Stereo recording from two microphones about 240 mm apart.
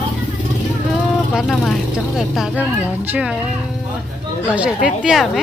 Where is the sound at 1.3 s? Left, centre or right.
Centre.